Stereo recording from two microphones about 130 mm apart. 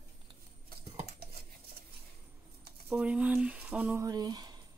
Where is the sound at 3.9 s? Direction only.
30° right (ahead or behind).